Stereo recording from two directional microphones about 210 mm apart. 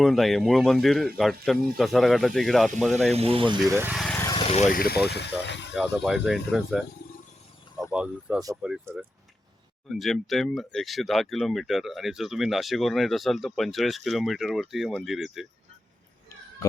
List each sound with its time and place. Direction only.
0.0 s speech: centre (ahead or behind)
3.2 s speech: 25° right (ahead or behind)
3.7 s speech: 10° right (ahead or behind)
3.9 s vehicle: centre (ahead or behind)
4.2 s vehicle: 20° left (ahead or behind)
4.7 s speech: 45° left (ahead or behind)
5.7 s speech: centre (ahead or behind)